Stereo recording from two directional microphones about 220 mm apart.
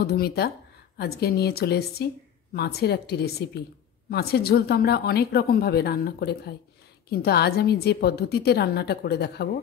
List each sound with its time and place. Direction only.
0.0 s a woman's voice: 45° left (ahead or behind)